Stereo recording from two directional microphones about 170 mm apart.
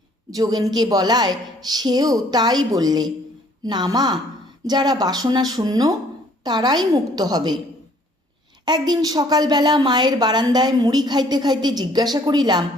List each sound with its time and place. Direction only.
0.3 s a woman's voice: 20° right (ahead or behind)
8.6 s a woman's voice: 25° right (ahead or behind)